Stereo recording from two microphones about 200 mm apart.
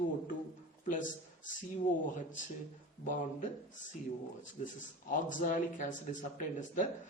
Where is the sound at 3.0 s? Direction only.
40° left (ahead or behind).